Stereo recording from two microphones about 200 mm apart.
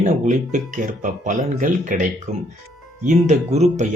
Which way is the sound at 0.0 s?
40° right (ahead or behind).